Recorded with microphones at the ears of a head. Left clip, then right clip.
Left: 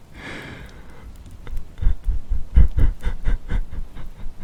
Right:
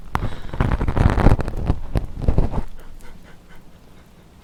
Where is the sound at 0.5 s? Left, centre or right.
Right.